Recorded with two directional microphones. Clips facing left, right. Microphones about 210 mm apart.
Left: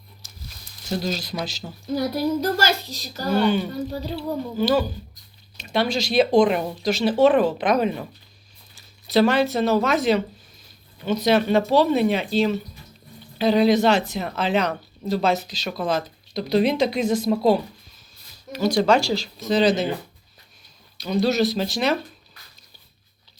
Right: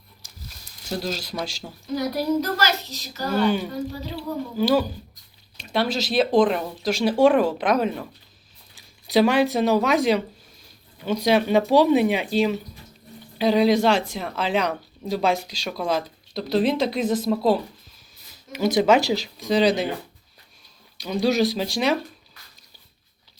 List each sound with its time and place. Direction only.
0.9 s speech: 5° right (ahead or behind)
2.0 s a child's voice: 30° left (ahead or behind)
3.4 s speech: 5° right (ahead or behind)
8.7 s speech: 15° right (ahead or behind)
14.1 s speech: 5° left (ahead or behind)
14.3 s speech: 5° right (ahead or behind)
18.6 s speech: 20° right (ahead or behind)
21.0 s speech: 15° right (ahead or behind)